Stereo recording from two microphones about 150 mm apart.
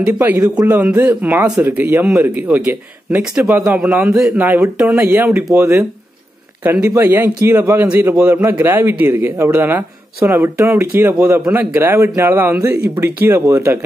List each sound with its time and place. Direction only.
0.0 s a man's voice: 15° right (ahead or behind)